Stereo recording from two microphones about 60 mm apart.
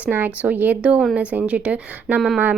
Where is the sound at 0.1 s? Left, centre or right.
Right.